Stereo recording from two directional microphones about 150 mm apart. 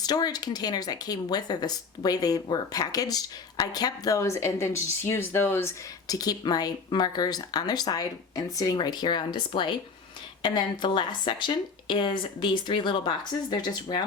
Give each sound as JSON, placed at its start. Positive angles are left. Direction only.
{"t": 0.0, "sound": "speech", "side_deg": 25}
{"t": 10.4, "sound": "speech", "side_deg": 30}